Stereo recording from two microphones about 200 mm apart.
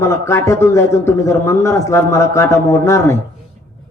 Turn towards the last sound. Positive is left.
turn(degrees=15)  # may be behind; listen again after turning